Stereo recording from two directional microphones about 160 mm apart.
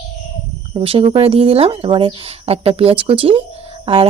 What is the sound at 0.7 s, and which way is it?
Speech, 35° right (ahead or behind).